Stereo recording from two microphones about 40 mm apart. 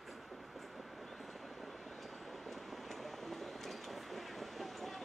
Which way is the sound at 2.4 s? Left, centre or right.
Centre.